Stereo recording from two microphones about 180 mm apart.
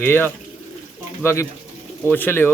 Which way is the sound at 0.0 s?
10° left (ahead or behind).